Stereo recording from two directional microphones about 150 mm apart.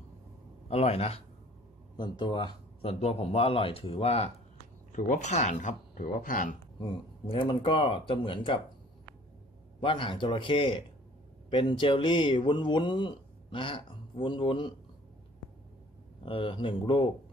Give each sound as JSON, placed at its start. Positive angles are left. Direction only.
{"t": 0.7, "sound": "speech", "side_deg": 40}
{"t": 2.0, "sound": "speech", "side_deg": 30}
{"t": 4.9, "sound": "speech", "side_deg": 55}
{"t": 6.8, "sound": "speech", "side_deg": 35}
{"t": 9.8, "sound": "speech", "side_deg": 35}
{"t": 16.3, "sound": "speech", "side_deg": 35}